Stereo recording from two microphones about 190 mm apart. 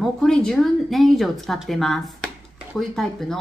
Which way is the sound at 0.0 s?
5° left (ahead or behind).